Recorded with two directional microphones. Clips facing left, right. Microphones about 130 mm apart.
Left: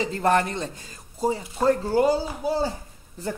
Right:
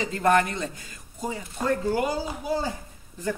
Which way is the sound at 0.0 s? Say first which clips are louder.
Even; 35° left (ahead or behind).